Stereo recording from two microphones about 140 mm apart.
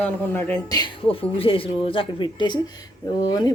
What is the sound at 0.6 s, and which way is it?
Speech, 25° left (ahead or behind).